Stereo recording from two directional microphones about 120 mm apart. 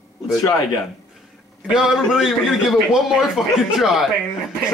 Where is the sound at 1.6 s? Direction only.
5° right (ahead or behind).